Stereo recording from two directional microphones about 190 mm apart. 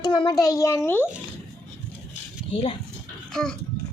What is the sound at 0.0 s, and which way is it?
A child's voice, 20° left (ahead or behind).